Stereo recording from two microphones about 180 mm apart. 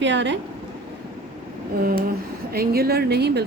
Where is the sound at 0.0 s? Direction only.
75° right (ahead or behind).